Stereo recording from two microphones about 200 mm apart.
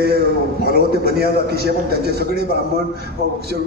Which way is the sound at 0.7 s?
50° right (ahead or behind).